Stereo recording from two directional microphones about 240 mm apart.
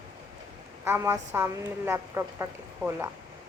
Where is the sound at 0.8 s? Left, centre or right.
Centre.